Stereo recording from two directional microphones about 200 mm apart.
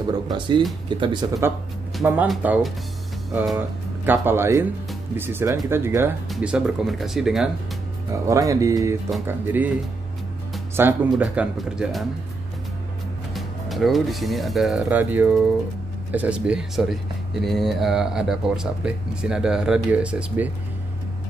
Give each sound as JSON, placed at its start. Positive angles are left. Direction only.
{"t": 0.8, "sound": "speech", "side_deg": -25}
{"t": 2.0, "sound": "speech", "side_deg": -5}
{"t": 8.1, "sound": "speech", "side_deg": -15}
{"t": 10.8, "sound": "speech", "side_deg": -10}
{"t": 13.3, "sound": "speech", "side_deg": 0}